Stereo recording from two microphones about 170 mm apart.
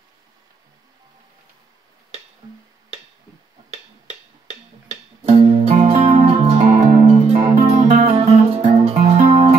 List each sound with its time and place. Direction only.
2.4 s music: 25° right (ahead or behind)
5.2 s music: 35° right (ahead or behind)